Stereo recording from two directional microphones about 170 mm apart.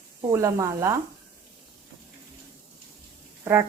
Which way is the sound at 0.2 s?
20° right (ahead or behind).